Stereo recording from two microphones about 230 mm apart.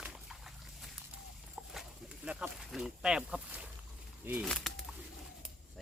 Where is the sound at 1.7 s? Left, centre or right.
Centre.